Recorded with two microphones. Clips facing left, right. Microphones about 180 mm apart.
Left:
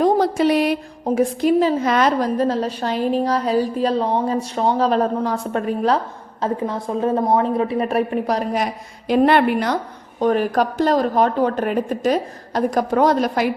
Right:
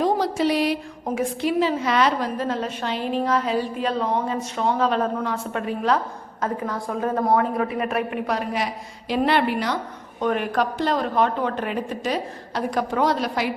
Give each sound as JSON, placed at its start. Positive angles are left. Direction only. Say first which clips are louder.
{"t": 0.0, "sound": "a sound", "louder": "left 5 dB", "side_deg": 50}
{"t": 1.0, "sound": "a woman's voice", "louder": "left 7 dB", "side_deg": 40}
{"t": 6.4, "sound": "a woman's voice", "louder": "left 4 dB", "side_deg": 25}
{"t": 10.2, "sound": "speech", "louder": "left 5 dB", "side_deg": 35}